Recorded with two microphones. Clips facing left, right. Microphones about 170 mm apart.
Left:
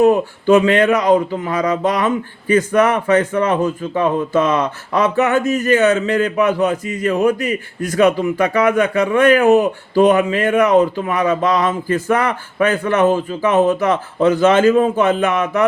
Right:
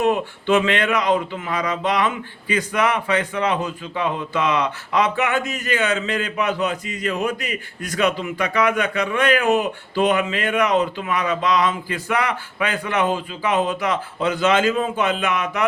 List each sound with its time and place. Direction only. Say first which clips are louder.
0.0 s a man's voice: left 7 dB; 40° left (ahead or behind)